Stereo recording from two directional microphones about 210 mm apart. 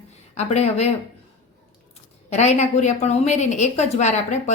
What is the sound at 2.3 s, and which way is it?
A woman's voice, 35° left (ahead or behind).